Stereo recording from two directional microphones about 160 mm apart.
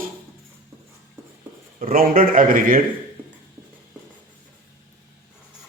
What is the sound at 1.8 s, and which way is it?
Speech, 60° right (ahead or behind).